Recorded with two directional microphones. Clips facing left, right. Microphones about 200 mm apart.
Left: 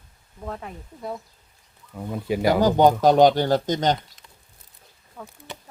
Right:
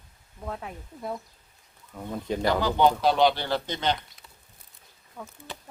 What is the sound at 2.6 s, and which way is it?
Speech, 45° left (ahead or behind).